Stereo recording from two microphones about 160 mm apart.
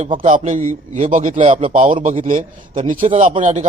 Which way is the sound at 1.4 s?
35° right (ahead or behind).